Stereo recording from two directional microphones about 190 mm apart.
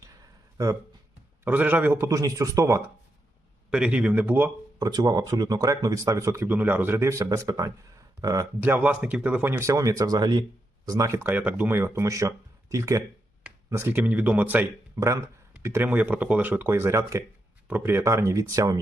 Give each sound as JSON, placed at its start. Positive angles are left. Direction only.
{"t": 0.5, "sound": "speech", "side_deg": -15}
{"t": 3.7, "sound": "speech", "side_deg": -5}